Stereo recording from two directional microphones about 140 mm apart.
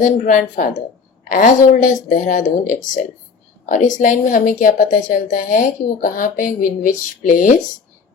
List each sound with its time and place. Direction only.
0.0 s a woman's voice: 65° left (ahead or behind)